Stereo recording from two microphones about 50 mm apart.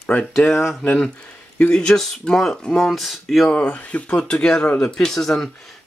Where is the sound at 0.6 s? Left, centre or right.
Centre.